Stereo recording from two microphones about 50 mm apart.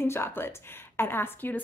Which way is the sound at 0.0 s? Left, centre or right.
Left.